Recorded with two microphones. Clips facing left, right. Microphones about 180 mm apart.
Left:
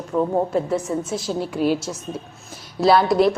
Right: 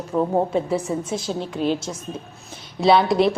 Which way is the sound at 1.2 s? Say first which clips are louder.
Left 3 dB; 10° left (ahead or behind).